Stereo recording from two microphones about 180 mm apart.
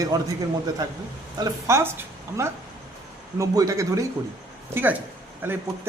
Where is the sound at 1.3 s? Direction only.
15° right (ahead or behind).